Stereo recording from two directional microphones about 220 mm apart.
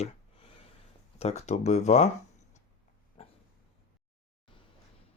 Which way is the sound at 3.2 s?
25° left (ahead or behind).